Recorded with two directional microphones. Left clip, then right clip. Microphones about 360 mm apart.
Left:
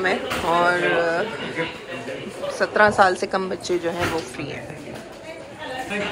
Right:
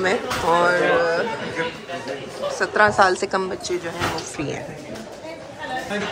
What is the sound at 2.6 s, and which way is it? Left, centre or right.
A woman's voice, centre.